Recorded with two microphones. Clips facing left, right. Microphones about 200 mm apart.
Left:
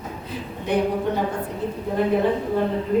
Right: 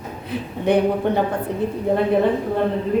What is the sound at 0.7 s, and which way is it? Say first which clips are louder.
Speech: right 5 dB; 60° right (ahead or behind).